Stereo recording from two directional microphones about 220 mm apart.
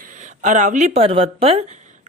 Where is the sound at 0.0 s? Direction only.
35° right (ahead or behind).